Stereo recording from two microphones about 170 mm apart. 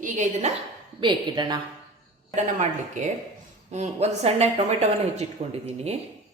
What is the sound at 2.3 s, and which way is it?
A woman's voice, 45° right (ahead or behind).